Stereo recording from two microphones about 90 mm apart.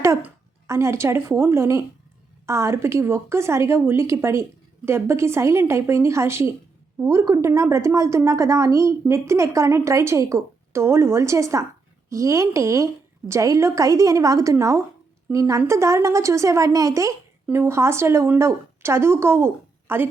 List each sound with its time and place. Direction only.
0.7 s a woman's voice: 30° right (ahead or behind)